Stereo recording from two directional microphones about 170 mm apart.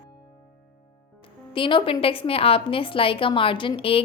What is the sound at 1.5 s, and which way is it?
A woman's voice, 30° left (ahead or behind).